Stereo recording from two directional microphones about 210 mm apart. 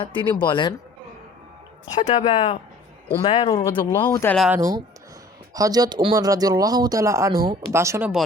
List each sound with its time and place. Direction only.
0.0 s speech: 20° left (ahead or behind)
2.0 s speech: 35° left (ahead or behind)
3.5 s speech: 15° left (ahead or behind)
4.4 s speech: 5° right (ahead or behind)
5.5 s speech: 15° right (ahead or behind)